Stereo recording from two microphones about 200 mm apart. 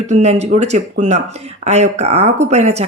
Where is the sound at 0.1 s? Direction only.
35° right (ahead or behind).